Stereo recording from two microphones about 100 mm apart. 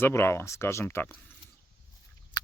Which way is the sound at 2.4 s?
45° left (ahead or behind).